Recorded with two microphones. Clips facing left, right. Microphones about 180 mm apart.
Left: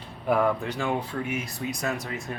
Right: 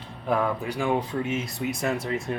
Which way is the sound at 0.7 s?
20° right (ahead or behind).